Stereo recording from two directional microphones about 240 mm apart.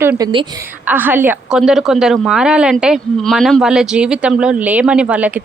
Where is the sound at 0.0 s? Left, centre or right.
Centre.